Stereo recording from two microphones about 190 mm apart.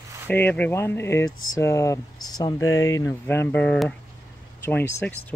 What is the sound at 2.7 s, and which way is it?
Speech, 90° left.